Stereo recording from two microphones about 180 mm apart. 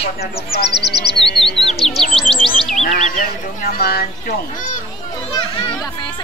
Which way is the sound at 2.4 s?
30° left (ahead or behind).